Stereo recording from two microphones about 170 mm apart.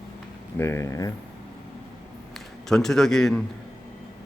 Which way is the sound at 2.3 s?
Centre (ahead or behind).